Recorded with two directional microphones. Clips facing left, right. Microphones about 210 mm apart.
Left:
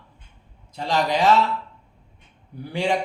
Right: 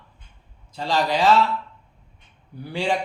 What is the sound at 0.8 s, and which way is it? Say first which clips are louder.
Speech: even; 20° left (ahead or behind).